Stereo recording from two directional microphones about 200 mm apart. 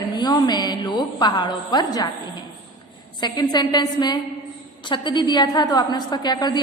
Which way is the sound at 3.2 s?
20° left (ahead or behind).